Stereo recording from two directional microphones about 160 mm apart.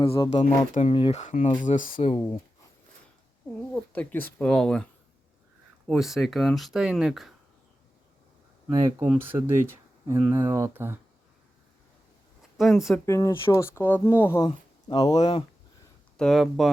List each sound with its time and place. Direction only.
0.0 s speech: 35° left (ahead or behind); by 1.9 s 50° left (ahead or behind)
2.0 s speech: 35° left (ahead or behind)
3.9 s speech: 10° left (ahead or behind)
5.9 s speech: centre (ahead or behind)
8.7 s speech: 20° right (ahead or behind)
12.5 s speech: centre (ahead or behind)
13.1 s speech: 20° left (ahead or behind)
14.4 s speech: 25° left (ahead or behind)
16.1 s speech: centre (ahead or behind)